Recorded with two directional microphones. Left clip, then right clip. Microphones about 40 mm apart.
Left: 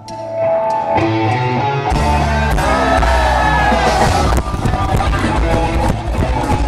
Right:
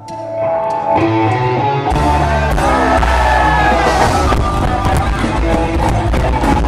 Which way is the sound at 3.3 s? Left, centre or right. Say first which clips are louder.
Right 2 dB; right.